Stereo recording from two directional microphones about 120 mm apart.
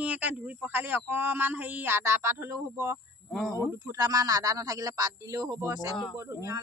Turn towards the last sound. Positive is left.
turn(degrees=-25)  # may be behind; listen again after turning